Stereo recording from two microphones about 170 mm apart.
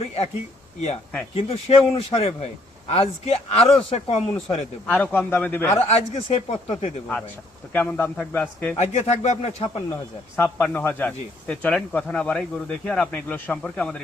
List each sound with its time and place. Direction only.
1.4 s speech: 35° left (ahead or behind)
4.4 s speech: 5° left (ahead or behind)
5.9 s speech: 35° left (ahead or behind)
7.7 s speech: 10° left (ahead or behind)
8.8 s speech: 40° left (ahead or behind)
10.3 s speech: 10° left (ahead or behind)